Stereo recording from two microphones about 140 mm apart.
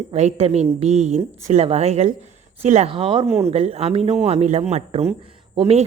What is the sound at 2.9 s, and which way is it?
A woman's voice, 40° right (ahead or behind).